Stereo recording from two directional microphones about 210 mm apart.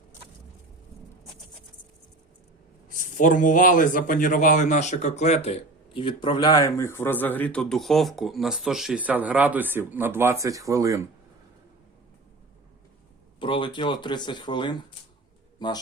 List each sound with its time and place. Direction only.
2.9 s speech: 40° left (ahead or behind); by 11.0 s 15° right (ahead or behind)
13.4 s speech: 25° left (ahead or behind)